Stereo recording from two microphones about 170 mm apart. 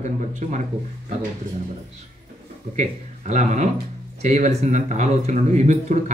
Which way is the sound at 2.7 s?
45° right (ahead or behind).